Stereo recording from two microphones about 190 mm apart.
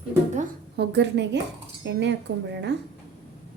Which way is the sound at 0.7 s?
65° right (ahead or behind).